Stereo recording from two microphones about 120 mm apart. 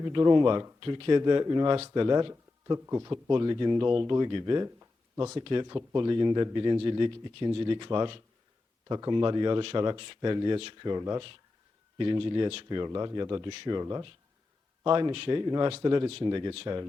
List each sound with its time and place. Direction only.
0.0 s speech: 35° right (ahead or behind)
5.4 s speech: 40° right (ahead or behind)
11.9 s speech: 40° right (ahead or behind)
15.1 s speech: 50° right (ahead or behind)
15.4 s speech: 35° right (ahead or behind)